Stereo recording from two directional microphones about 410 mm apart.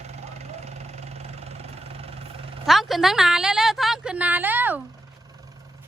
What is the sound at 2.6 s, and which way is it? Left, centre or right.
A woman's voice, centre.